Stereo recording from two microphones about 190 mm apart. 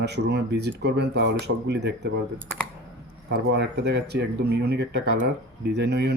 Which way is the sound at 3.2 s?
65° right (ahead or behind).